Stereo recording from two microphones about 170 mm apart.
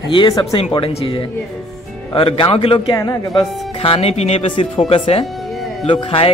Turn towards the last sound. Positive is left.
turn(degrees=30)  # may be behind; listen again after turning